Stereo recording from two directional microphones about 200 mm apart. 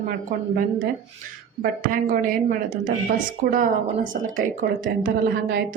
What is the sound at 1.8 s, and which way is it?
A woman's voice, 45° right (ahead or behind).